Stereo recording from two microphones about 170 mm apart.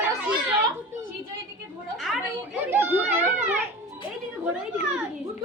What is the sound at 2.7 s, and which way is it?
Speech, 15° right (ahead or behind).